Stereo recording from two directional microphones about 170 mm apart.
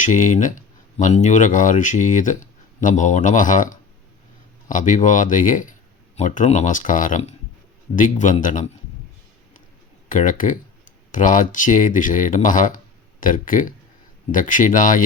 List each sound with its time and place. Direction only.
0.0 s speech: 50° left (ahead or behind)
10.1 s speech: 50° left (ahead or behind)